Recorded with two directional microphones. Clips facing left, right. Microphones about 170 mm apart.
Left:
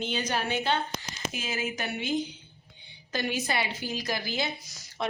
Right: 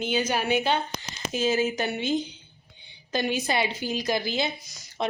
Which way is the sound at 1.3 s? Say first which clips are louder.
Right 9 dB; 30° right (ahead or behind).